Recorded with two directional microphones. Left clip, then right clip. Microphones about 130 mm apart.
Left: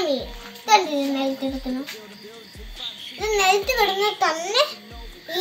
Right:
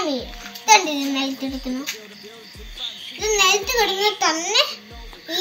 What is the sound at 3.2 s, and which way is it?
A child's voice, 40° left (ahead or behind).